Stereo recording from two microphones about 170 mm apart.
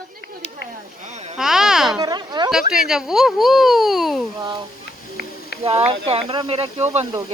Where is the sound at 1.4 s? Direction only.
5° right (ahead or behind).